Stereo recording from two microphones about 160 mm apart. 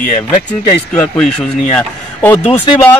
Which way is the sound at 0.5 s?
10° left (ahead or behind).